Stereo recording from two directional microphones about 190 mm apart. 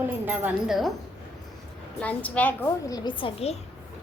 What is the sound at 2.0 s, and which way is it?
A woman's voice, 5° left (ahead or behind).